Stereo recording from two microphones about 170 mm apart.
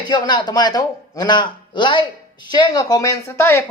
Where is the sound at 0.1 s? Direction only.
25° left (ahead or behind).